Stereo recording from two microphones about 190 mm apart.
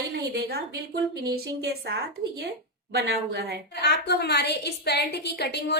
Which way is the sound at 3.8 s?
60° left (ahead or behind).